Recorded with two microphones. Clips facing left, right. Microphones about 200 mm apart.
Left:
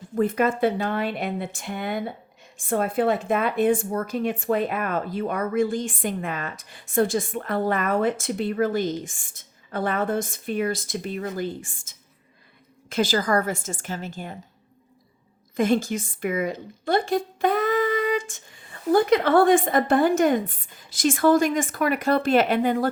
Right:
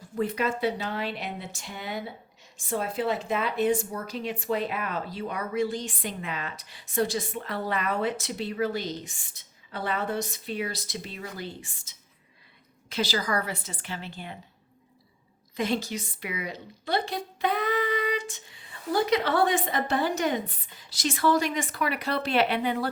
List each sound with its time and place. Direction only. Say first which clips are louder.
0.2 s speech: left 6 dB; 50° left (ahead or behind)
15.5 s speech: left 7 dB; 50° left (ahead or behind)